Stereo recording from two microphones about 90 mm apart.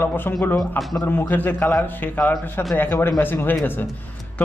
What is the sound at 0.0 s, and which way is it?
A man's voice, 25° left (ahead or behind).